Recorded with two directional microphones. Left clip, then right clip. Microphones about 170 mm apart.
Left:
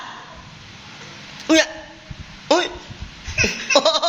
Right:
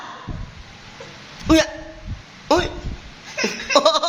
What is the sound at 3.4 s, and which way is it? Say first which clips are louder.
Laughter: right 1 dB; 10° right (ahead or behind).